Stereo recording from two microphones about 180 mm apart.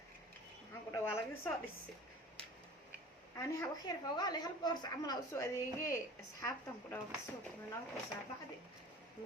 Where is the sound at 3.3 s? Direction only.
20° left (ahead or behind).